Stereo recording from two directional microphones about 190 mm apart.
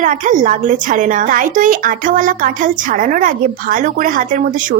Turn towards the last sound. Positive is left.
turn(degrees=-45)  # may be behind; listen again after turning